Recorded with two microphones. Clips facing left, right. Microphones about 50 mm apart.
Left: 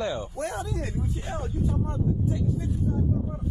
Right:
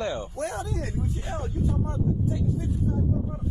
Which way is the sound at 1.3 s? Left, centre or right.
Right.